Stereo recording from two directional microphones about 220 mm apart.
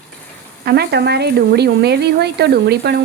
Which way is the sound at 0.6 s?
50° right (ahead or behind).